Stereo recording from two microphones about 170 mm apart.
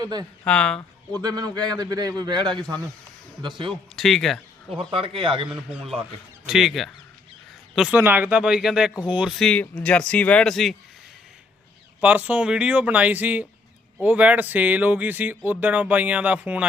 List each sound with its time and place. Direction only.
0.0 s a man's voice: 25° right (ahead or behind)
0.4 s speech: 5° left (ahead or behind)
1.2 s a man's voice: 25° right (ahead or behind)
3.9 s speech: centre (ahead or behind)
4.8 s a man's voice: 30° right (ahead or behind)
5.5 s speech: 5° right (ahead or behind)
11.9 s speech: 10° right (ahead or behind)